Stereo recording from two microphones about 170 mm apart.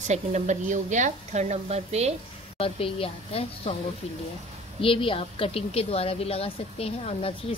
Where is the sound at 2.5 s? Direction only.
35° left (ahead or behind).